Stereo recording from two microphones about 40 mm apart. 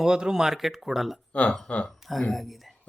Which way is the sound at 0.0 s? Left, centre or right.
Centre.